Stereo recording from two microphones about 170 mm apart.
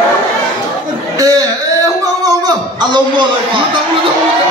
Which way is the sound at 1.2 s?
20° right (ahead or behind).